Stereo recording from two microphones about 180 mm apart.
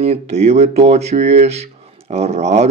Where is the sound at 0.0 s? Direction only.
35° right (ahead or behind).